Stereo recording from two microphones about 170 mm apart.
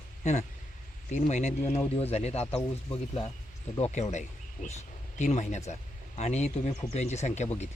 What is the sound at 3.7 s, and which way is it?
Speech, 40° left (ahead or behind).